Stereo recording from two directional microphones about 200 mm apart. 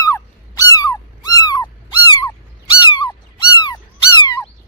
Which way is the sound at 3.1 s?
20° left (ahead or behind).